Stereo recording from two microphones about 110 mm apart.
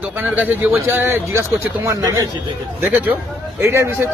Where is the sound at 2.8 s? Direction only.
20° right (ahead or behind).